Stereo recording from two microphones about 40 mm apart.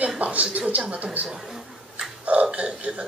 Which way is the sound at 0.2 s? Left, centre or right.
Right.